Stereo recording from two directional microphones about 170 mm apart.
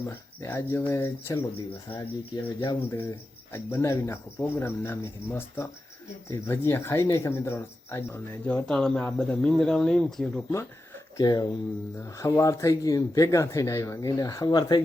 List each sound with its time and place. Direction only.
0.0 s speech: 15° left (ahead or behind)
11.2 s speech: 25° left (ahead or behind)